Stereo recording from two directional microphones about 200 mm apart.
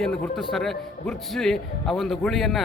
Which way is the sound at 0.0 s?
Centre (ahead or behind).